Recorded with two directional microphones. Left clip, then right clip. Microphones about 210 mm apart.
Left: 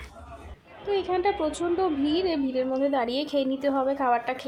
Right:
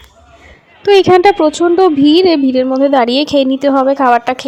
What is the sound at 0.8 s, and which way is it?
Speech, 50° right (ahead or behind).